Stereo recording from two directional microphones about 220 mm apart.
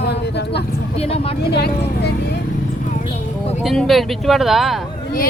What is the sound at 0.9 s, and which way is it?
Speech, 25° left (ahead or behind).